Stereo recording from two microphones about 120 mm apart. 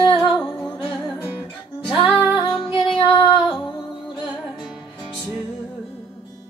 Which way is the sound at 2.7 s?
50° left (ahead or behind).